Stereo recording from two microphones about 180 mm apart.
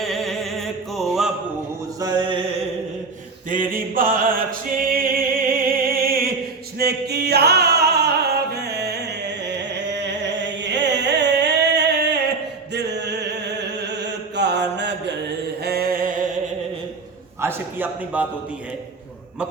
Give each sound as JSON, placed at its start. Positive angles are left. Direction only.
{"t": 0.0, "sound": "music", "side_deg": 0}
{"t": 2.0, "sound": "mantra", "side_deg": -25}
{"t": 3.5, "sound": "chant", "side_deg": -50}
{"t": 6.7, "sound": "singing", "side_deg": -60}
{"t": 8.5, "sound": "music", "side_deg": -65}
{"t": 10.6, "sound": "music", "side_deg": -75}
{"t": 12.7, "sound": "chant", "side_deg": -70}
{"t": 15.6, "sound": "music", "side_deg": -60}
{"t": 17.4, "sound": "a sound", "side_deg": -10}